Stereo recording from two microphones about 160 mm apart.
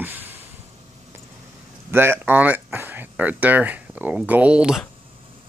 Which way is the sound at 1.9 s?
15° right (ahead or behind).